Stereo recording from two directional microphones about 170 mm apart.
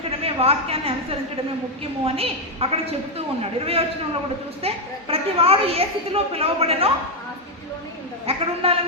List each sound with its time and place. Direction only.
0.2 s a woman's voice: 35° right (ahead or behind)
8.3 s a woman's voice: 35° right (ahead or behind)